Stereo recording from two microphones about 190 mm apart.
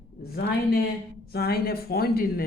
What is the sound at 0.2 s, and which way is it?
A man's voice, 55° left (ahead or behind).